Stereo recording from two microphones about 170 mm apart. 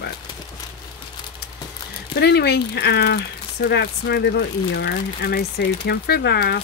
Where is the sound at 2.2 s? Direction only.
75° left (ahead or behind).